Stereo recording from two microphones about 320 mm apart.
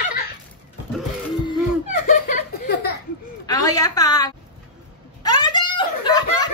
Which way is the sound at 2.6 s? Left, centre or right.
Left.